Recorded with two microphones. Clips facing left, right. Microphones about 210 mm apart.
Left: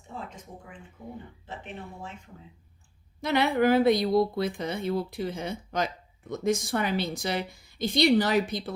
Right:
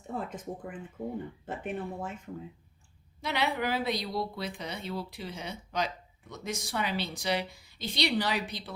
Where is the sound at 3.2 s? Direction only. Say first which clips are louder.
Left 7 dB; 50° left (ahead or behind).